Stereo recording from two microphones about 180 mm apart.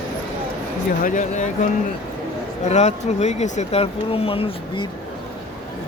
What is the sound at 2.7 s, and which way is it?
Speech, 40° left (ahead or behind).